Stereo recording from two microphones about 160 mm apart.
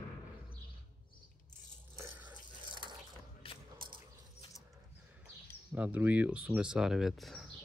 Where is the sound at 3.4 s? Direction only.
35° left (ahead or behind).